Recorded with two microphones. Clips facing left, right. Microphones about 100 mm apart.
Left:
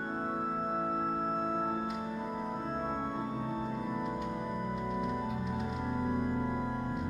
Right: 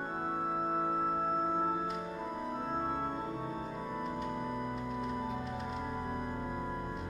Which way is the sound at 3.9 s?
Centre (ahead or behind).